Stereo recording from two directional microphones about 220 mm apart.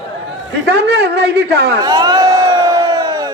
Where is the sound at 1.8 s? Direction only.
20° right (ahead or behind).